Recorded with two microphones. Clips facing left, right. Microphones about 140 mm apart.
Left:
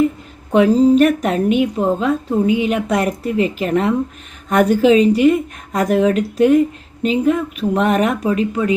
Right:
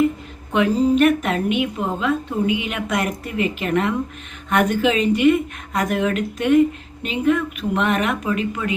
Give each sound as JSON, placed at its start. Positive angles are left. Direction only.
{"t": 0.5, "sound": "speech", "side_deg": 35}